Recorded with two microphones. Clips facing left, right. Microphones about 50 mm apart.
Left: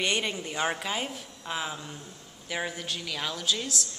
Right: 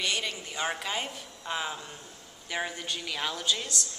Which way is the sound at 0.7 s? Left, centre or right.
Centre.